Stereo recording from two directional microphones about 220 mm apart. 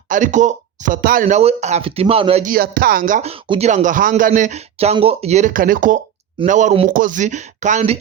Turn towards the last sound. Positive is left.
turn(degrees=-30)  # may be behind; listen again after turning